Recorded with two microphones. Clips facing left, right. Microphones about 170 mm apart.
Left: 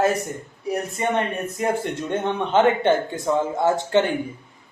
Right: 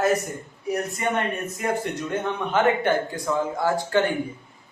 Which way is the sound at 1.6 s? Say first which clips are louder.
Left 2 dB; 25° left (ahead or behind).